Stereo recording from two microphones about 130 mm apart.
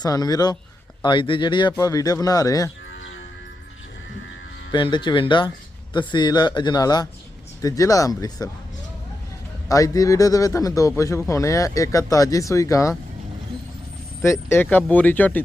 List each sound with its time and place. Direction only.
0.0 s speech: 30° left (ahead or behind)
4.7 s speech: 35° left (ahead or behind)
9.6 s speech: 25° left (ahead or behind)
14.2 s speech: 20° left (ahead or behind)